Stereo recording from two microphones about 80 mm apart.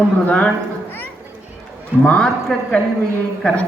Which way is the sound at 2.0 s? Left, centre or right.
Centre.